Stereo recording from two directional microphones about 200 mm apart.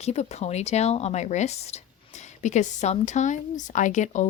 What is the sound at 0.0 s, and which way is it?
A woman's voice, 35° left (ahead or behind).